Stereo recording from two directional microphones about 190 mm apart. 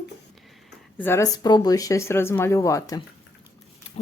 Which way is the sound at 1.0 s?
10° left (ahead or behind).